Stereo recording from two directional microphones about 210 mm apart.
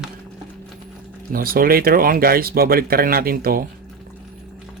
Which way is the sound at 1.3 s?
45° right (ahead or behind).